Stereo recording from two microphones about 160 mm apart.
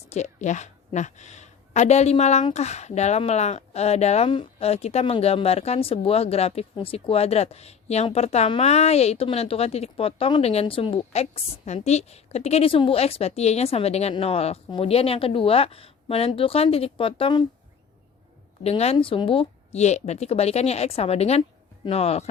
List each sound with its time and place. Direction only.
0.0 s a woman's voice: 45° left (ahead or behind)
18.6 s a woman's voice: 40° left (ahead or behind)